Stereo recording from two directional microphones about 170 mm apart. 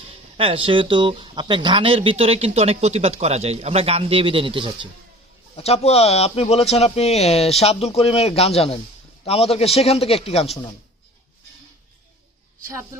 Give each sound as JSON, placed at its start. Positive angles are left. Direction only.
{"t": 0.1, "sound": "speech", "side_deg": -35}
{"t": 5.5, "sound": "speech", "side_deg": 35}